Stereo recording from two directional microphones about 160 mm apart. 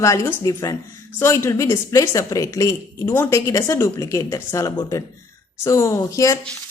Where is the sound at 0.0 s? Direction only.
20° left (ahead or behind).